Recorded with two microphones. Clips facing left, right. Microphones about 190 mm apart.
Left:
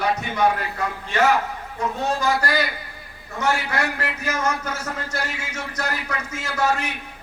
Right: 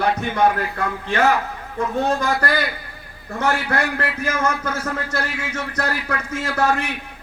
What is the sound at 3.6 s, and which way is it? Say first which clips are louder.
Speech: right 3 dB; 55° right (ahead or behind).